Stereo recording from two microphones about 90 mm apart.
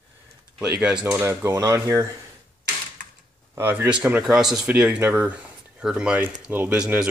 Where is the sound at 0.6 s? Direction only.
10° right (ahead or behind).